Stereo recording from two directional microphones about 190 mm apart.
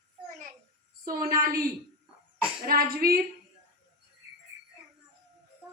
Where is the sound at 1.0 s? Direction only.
50° right (ahead or behind).